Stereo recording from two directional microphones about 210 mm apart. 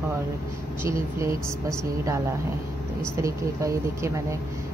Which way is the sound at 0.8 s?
15° right (ahead or behind).